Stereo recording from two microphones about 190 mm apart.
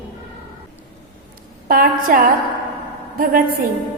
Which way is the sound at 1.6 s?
50° right (ahead or behind).